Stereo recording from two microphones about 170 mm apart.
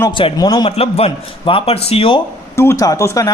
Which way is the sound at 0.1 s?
30° left (ahead or behind).